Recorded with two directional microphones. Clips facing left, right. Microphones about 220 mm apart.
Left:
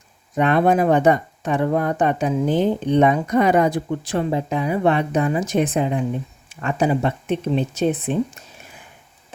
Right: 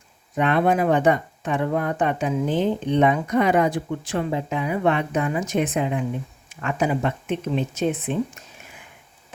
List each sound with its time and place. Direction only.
0.3 s speech: 40° left (ahead or behind)